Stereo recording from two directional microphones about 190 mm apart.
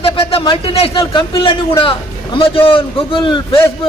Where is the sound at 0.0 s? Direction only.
30° left (ahead or behind).